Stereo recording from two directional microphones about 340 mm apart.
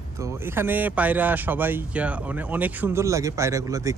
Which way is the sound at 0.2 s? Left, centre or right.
Centre.